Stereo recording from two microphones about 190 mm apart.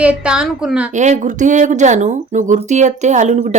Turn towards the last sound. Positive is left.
turn(degrees=-35)  # may be behind; listen again after turning